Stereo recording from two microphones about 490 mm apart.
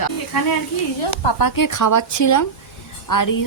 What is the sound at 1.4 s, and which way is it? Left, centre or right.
A woman's voice, left.